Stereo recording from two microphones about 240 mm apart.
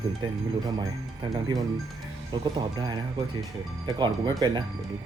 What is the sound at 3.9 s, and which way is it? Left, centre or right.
Speech, centre.